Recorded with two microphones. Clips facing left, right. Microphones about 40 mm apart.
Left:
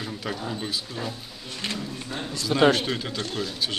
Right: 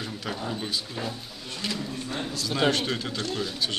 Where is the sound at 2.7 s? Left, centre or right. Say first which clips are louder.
Left 3 dB; centre.